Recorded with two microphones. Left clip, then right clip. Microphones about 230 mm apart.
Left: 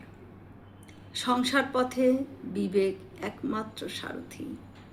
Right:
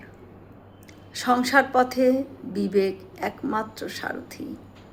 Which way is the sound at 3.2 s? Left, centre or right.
Centre.